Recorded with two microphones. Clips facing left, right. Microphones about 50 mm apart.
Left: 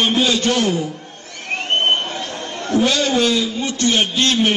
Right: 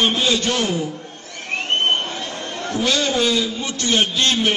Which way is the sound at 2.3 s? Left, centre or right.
Centre.